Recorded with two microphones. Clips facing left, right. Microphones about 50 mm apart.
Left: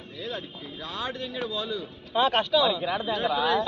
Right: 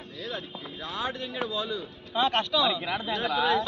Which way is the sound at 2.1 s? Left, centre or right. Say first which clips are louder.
Left 3 dB; centre.